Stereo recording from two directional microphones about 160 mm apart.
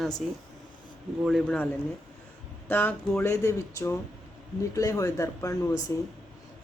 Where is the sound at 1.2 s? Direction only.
Centre (ahead or behind).